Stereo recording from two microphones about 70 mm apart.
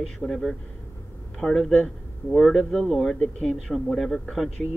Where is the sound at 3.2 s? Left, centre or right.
Centre.